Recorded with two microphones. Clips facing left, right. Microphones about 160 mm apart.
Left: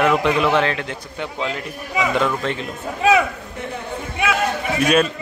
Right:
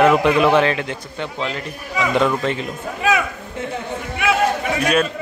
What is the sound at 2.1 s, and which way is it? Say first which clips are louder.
Speech: right 5 dB; 5° right (ahead or behind).